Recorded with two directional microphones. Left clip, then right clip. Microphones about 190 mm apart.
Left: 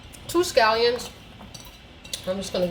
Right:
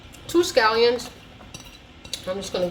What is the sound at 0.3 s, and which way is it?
Speech, 20° right (ahead or behind).